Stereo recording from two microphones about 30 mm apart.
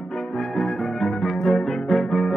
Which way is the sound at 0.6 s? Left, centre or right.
Centre.